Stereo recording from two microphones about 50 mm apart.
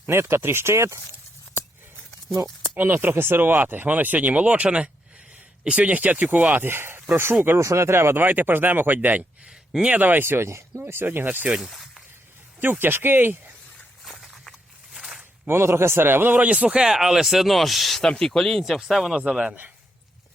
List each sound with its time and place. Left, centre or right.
0.1 s speech: right
2.7 s speech: right
6.7 s a man's voice: right
7.6 s speech: right
8.2 s a man's voice: right
11.0 s a man's voice: right
11.6 s a sound: centre
12.8 s a man's voice: right
14.0 s a sound: centre
15.4 s a man's voice: right; by 16.9 s centre
16.9 s speech: centre
18.1 s speech: centre
19.2 s speech: centre